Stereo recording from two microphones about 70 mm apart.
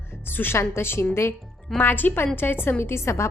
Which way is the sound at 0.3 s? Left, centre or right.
Left.